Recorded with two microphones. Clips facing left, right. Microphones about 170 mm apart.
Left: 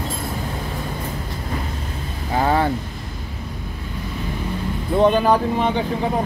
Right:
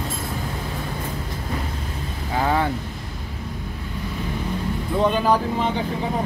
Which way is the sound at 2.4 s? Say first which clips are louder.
Left 3 dB; 35° left (ahead or behind).